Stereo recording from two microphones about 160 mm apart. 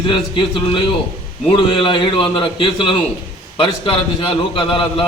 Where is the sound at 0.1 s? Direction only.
30° left (ahead or behind).